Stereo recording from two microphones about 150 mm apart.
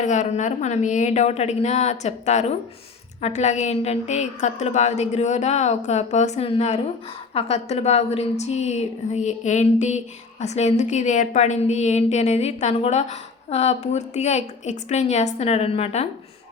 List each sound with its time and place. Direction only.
0.0 s a woman's voice: 55° left (ahead or behind)